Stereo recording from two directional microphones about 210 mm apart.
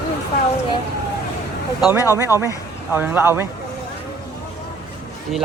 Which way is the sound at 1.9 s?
15° left (ahead or behind).